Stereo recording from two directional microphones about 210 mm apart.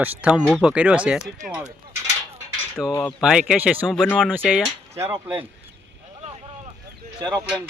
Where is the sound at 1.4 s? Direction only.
35° right (ahead or behind).